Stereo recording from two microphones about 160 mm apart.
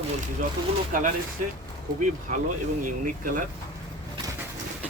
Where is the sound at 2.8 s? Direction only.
55° right (ahead or behind).